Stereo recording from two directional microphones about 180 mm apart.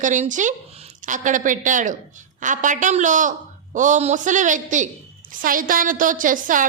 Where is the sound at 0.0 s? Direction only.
45° right (ahead or behind).